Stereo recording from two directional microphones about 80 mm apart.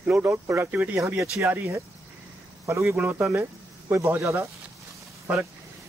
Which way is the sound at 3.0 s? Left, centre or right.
Centre.